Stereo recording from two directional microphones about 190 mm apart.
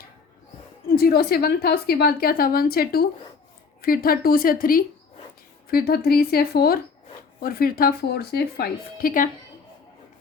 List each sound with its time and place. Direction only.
0.9 s a woman's voice: 50° left (ahead or behind)